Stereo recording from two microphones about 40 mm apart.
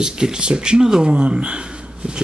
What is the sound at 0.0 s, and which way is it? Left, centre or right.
Speech, centre.